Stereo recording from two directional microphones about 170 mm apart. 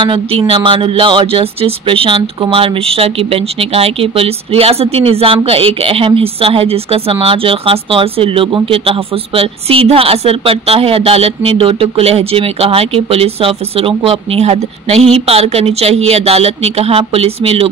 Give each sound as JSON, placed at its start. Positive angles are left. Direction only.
{"t": 0.0, "sound": "speech", "side_deg": -30}